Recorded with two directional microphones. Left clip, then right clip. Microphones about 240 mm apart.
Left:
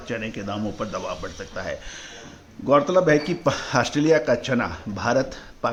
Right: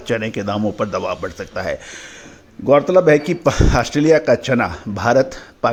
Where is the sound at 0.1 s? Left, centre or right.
Right.